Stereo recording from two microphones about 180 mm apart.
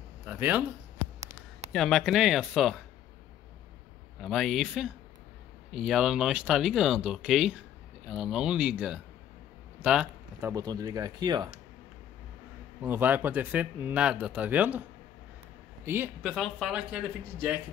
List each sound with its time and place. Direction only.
0.3 s speech: 10° right (ahead or behind)
1.7 s speech: centre (ahead or behind)
4.2 s speech: centre (ahead or behind)
10.4 s speech: 20° right (ahead or behind)
12.8 s speech: 10° right (ahead or behind)